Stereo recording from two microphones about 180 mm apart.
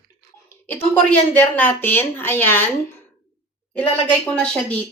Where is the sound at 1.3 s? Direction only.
10° left (ahead or behind).